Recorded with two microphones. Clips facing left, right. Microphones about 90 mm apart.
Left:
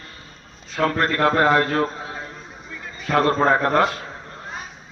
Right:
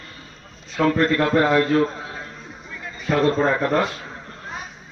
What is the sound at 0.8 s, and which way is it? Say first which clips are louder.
Speech: right 1 dB; 45° left (ahead or behind).